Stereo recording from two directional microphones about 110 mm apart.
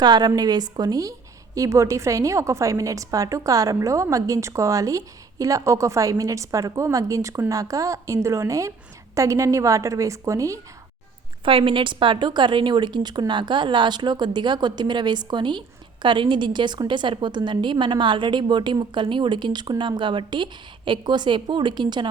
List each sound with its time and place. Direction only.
0.0 s a woman's voice: 40° right (ahead or behind)
11.4 s a woman's voice: 50° right (ahead or behind)